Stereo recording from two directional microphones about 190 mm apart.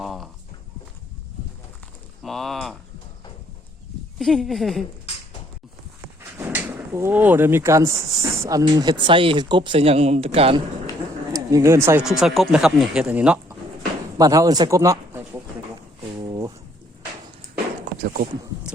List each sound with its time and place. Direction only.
0.0 s a sound: centre (ahead or behind)
2.2 s speech: centre (ahead or behind)
4.2 s speech: centre (ahead or behind)
6.3 s speech: 10° right (ahead or behind); by 10.6 s 30° right (ahead or behind)
11.3 s speech: 15° right (ahead or behind)
12.0 s speech: centre (ahead or behind)
14.2 s speech: 20° right (ahead or behind)